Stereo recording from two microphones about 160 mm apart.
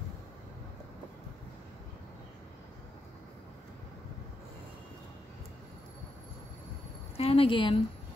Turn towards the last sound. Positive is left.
turn(degrees=35)  # may be behind; listen again after turning